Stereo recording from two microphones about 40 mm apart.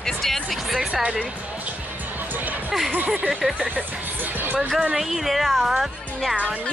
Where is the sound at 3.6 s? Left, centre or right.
Right.